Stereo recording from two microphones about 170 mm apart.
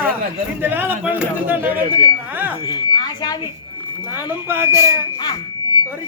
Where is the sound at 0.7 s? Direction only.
10° right (ahead or behind).